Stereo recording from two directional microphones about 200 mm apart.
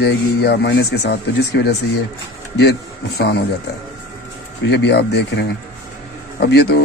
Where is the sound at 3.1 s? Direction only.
55° left (ahead or behind).